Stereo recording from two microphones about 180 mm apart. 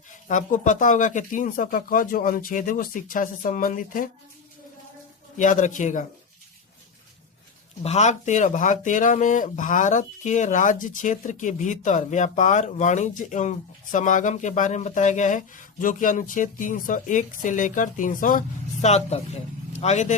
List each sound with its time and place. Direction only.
0.1 s speech: 45° left (ahead or behind)
5.4 s speech: 45° left (ahead or behind)
7.8 s speech: 40° left (ahead or behind)